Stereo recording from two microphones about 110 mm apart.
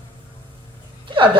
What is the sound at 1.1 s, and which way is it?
Speech, 50° right (ahead or behind).